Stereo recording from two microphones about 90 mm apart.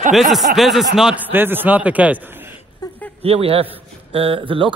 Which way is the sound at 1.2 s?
25° right (ahead or behind).